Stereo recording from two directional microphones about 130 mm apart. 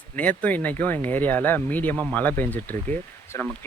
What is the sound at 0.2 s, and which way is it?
Speech, 10° left (ahead or behind).